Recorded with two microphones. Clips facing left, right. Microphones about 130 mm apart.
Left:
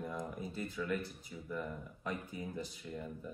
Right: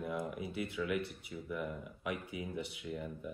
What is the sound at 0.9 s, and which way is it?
Speech, 65° right (ahead or behind).